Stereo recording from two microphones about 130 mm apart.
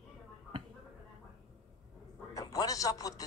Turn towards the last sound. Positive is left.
turn(degrees=25)  # may be behind; listen again after turning